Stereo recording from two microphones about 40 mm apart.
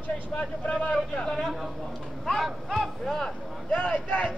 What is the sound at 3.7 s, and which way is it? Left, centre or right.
Speech, left.